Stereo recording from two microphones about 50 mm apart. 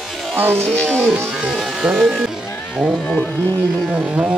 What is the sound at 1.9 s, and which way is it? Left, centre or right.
Speech, centre.